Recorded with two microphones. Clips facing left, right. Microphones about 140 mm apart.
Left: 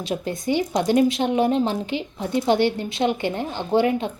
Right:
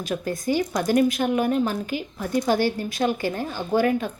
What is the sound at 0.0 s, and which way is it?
A woman's voice, 25° left (ahead or behind).